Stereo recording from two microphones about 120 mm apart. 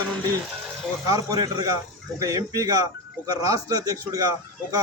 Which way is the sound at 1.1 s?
30° right (ahead or behind).